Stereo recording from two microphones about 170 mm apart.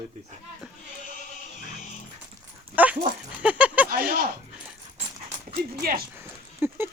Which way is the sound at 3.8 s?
60° right (ahead or behind).